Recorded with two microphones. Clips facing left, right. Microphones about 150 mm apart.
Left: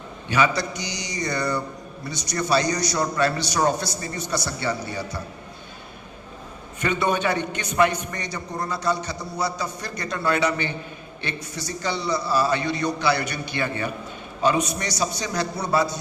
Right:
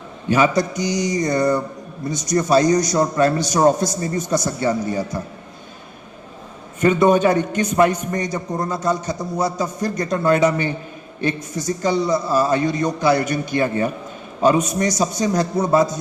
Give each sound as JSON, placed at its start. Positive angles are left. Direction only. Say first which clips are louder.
{"t": 0.3, "sound": "a man's voice", "louder": "right 5 dB", "side_deg": -45}
{"t": 6.7, "sound": "a man's voice", "louder": "right 9 dB", "side_deg": -45}